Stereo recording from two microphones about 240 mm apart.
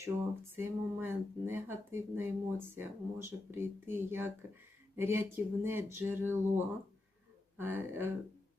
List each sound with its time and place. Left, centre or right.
0.0 s speech: centre
7.6 s speech: centre